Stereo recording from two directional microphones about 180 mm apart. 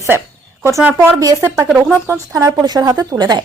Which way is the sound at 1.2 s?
20° right (ahead or behind).